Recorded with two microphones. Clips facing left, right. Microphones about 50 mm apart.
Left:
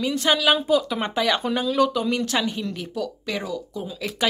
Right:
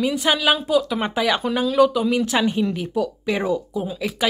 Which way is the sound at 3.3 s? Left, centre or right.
Right.